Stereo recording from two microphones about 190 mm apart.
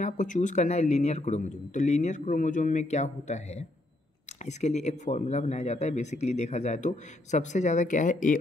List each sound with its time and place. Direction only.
0.0 s speech: 40° left (ahead or behind)